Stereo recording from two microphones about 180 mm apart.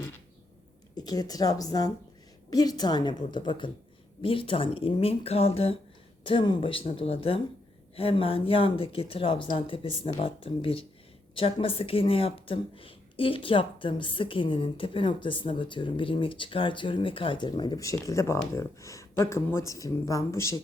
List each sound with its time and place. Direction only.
0.9 s speech: 20° left (ahead or behind)